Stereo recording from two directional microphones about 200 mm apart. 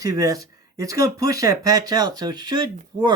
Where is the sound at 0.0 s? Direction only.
15° right (ahead or behind).